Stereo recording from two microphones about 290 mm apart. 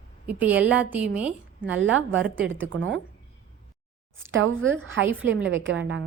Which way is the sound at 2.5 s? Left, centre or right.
Right.